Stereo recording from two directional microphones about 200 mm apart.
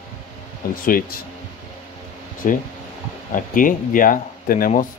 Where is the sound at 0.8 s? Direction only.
45° left (ahead or behind).